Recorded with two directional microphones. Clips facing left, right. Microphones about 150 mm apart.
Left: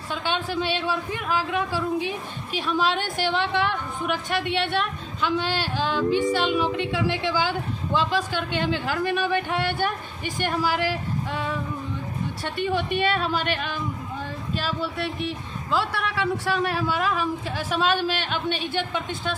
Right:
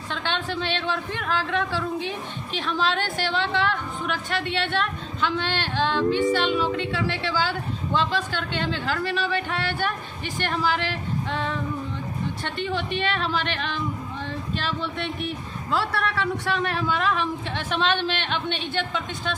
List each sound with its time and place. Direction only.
0.1 s a woman's voice: 10° left (ahead or behind)